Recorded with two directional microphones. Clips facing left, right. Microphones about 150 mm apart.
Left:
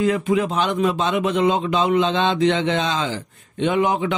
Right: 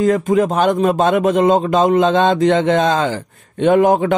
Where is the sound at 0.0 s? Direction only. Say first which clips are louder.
Right 5 dB; 40° right (ahead or behind).